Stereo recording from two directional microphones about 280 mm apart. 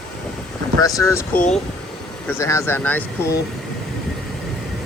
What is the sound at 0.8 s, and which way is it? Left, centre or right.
Speech, centre.